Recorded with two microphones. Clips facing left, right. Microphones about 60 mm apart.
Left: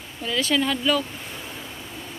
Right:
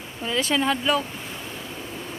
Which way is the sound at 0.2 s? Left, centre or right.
Right.